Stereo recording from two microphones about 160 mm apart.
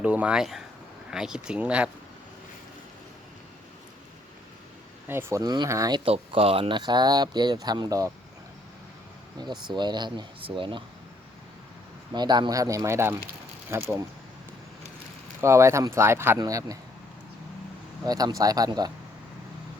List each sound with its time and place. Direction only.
0.0 s speech: 10° right (ahead or behind)
5.0 s speech: 15° right (ahead or behind)
6.1 s speech: 35° right (ahead or behind)
9.4 s speech: 25° right (ahead or behind)
12.1 s speech: 25° right (ahead or behind)
15.4 s speech: 15° right (ahead or behind)
18.0 s speech: 25° right (ahead or behind)